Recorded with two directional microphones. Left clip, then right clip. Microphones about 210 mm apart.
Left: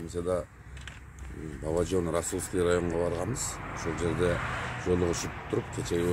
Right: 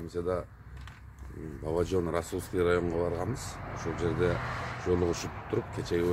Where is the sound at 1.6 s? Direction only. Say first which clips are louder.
Left 1 dB; 5° right (ahead or behind).